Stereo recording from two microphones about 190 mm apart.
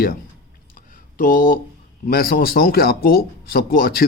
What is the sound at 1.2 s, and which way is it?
A man's voice, 45° left (ahead or behind).